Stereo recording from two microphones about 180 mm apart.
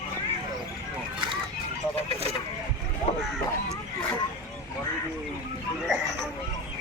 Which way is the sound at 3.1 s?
35° left (ahead or behind).